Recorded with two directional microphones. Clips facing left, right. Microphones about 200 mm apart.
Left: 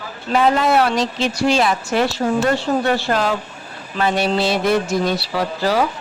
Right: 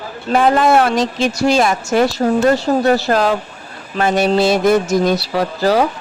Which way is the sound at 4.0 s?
45° right (ahead or behind).